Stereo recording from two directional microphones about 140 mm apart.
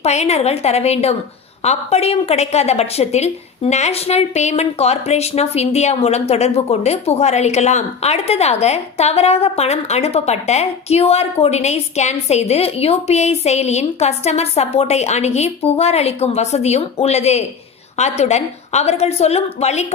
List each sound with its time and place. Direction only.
0.0 s a woman's voice: 50° left (ahead or behind)